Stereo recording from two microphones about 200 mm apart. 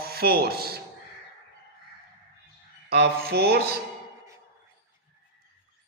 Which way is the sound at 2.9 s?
50° right (ahead or behind).